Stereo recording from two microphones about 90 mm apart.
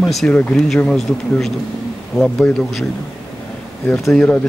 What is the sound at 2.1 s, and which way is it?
Speech, 30° left (ahead or behind).